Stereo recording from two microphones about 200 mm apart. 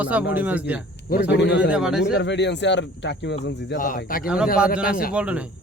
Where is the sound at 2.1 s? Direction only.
60° left (ahead or behind).